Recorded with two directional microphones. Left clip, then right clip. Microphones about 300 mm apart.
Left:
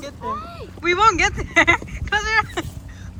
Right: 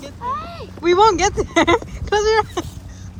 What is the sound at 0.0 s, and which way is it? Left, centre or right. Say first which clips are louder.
Speech: right 3 dB; centre.